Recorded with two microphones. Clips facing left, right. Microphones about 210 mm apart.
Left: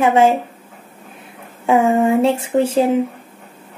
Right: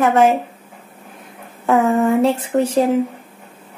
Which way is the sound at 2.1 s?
25° left (ahead or behind).